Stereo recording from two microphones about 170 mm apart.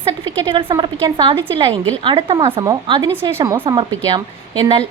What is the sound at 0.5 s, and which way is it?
Speech, 25° right (ahead or behind).